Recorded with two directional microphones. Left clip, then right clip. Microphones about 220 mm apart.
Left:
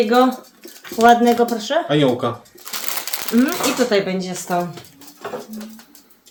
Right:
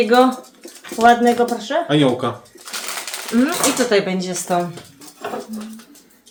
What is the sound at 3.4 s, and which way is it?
Speech, 10° left (ahead or behind).